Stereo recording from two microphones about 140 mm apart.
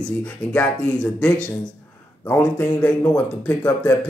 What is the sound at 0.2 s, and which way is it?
A man's voice, 10° left (ahead or behind).